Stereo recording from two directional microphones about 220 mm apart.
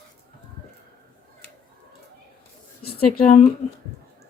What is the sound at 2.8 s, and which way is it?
Speech, 40° left (ahead or behind).